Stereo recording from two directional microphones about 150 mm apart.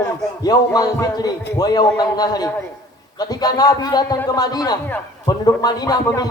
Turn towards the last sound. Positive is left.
turn(degrees=25)  # may be behind; listen again after turning